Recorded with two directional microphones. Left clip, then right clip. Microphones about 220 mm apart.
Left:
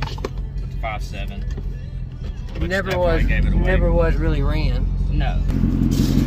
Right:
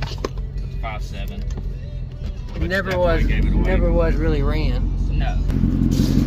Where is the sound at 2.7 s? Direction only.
5° right (ahead or behind).